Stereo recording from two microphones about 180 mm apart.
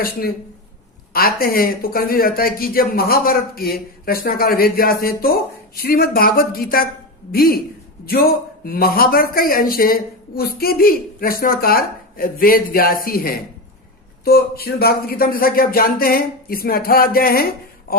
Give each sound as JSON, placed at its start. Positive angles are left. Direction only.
{"t": 0.0, "sound": "speech", "side_deg": 55}